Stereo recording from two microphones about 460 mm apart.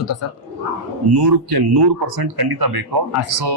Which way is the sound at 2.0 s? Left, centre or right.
Right.